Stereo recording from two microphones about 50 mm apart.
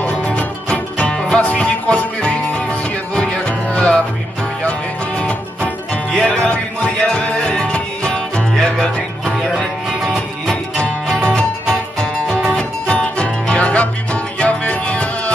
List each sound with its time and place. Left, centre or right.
0.0 s music: left
6.2 s music: centre
10.0 s music: centre
10.5 s music: centre